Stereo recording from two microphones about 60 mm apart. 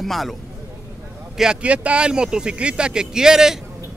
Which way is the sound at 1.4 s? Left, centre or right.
Centre.